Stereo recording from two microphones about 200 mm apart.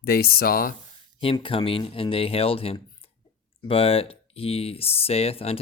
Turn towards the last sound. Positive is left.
turn(degrees=30)  # may be behind; listen again after turning